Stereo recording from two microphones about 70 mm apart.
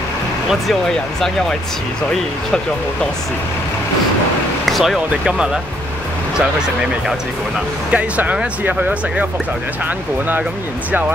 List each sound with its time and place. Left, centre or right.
4.6 s speech: centre